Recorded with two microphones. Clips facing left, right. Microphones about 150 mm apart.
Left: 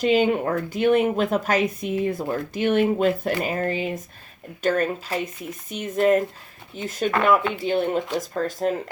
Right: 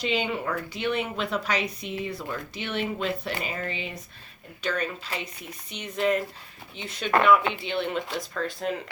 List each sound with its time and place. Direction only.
0.0 s a woman's voice: 50° left (ahead or behind)